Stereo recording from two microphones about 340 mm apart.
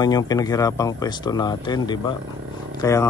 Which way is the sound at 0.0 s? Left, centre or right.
Centre.